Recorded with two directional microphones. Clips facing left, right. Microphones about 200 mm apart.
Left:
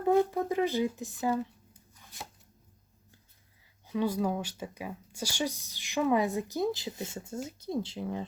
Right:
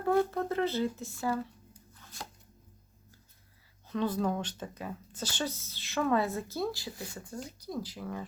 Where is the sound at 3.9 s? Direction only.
10° left (ahead or behind).